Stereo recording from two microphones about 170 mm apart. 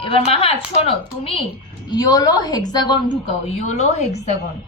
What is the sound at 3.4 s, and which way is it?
Speech, 40° left (ahead or behind).